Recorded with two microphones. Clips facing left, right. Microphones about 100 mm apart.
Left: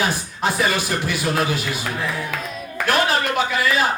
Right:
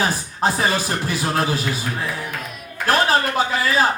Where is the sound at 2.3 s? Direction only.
90° left.